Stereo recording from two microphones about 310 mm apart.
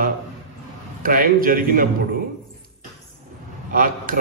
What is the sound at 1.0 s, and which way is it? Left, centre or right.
Speech, right.